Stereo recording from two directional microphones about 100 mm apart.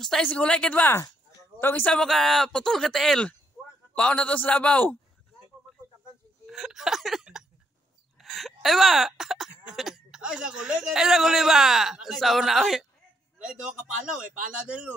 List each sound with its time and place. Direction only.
0.0 s a man's voice: 5° left (ahead or behind)
2.0 s a man's voice: centre (ahead or behind)
6.4 s a sound: 5° right (ahead or behind)
8.2 s gasp: centre (ahead or behind)
9.7 s a man's voice: centre (ahead or behind)